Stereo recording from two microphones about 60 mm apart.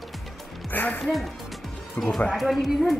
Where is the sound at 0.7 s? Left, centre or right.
Left.